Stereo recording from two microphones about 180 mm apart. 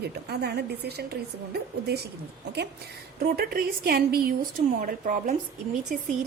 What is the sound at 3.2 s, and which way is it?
A woman's voice, 55° right (ahead or behind).